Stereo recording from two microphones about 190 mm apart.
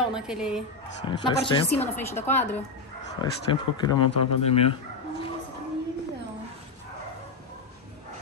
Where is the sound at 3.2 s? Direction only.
20° left (ahead or behind).